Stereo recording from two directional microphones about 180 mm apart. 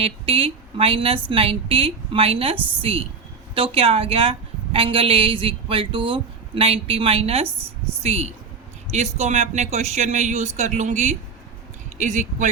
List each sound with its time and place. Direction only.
0.0 s a woman's voice: 30° right (ahead or behind)